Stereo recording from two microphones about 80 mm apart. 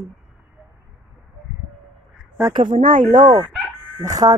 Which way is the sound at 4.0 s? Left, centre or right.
Right.